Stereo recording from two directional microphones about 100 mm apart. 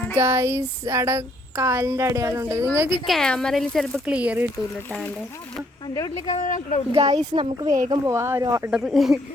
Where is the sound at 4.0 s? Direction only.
10° right (ahead or behind).